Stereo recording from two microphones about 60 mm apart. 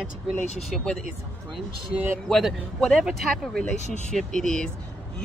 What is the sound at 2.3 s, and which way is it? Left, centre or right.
Speech, centre.